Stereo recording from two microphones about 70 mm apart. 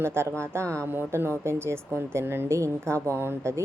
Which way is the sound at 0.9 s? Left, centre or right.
Right.